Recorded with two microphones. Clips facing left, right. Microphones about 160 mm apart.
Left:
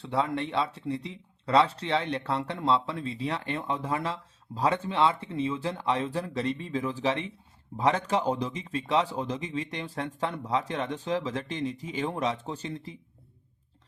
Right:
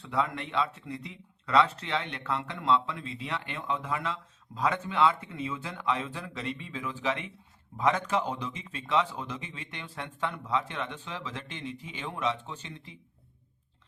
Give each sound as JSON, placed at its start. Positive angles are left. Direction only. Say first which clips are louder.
{"t": 0.0, "sound": "speech", "louder": "left 3 dB", "side_deg": 30}